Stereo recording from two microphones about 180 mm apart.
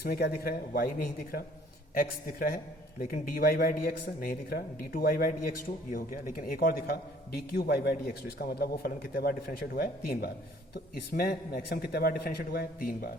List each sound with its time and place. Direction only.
0.0 s a man's voice: 60° left (ahead or behind)